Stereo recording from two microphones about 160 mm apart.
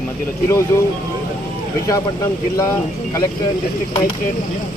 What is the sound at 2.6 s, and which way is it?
Speech, 20° left (ahead or behind).